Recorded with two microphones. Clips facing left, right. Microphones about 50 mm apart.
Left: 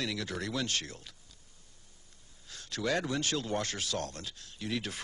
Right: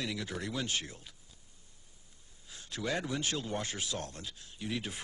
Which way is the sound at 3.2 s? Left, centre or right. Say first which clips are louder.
Left 3 dB; right.